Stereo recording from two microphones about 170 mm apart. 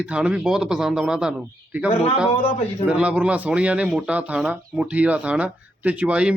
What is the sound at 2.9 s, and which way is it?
Speech, 10° right (ahead or behind).